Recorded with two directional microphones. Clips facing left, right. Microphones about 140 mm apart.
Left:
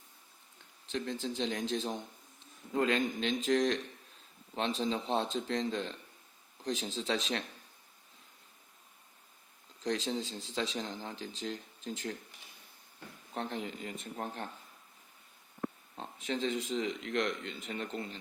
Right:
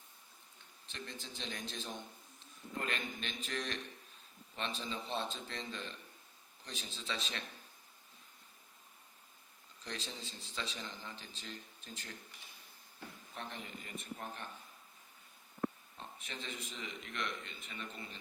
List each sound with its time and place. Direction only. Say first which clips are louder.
0.9 s speech: left 12 dB; 85° left
9.8 s speech: left 12 dB; 85° left
13.3 s speech: left 10 dB; 85° left
16.0 s speech: left 13 dB; 90° left